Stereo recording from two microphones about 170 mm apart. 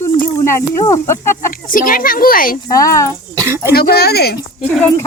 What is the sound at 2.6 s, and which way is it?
Speech, 20° left (ahead or behind).